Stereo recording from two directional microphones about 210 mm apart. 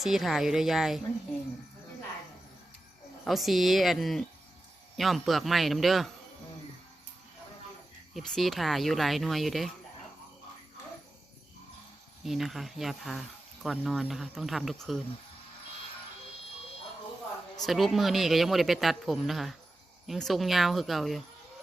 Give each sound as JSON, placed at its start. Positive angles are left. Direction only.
{"t": 0.0, "sound": "speech", "side_deg": 0}
{"t": 3.2, "sound": "speech", "side_deg": 0}
{"t": 8.1, "sound": "speech", "side_deg": 0}
{"t": 12.2, "sound": "speech", "side_deg": 0}
{"t": 17.7, "sound": "speech", "side_deg": 0}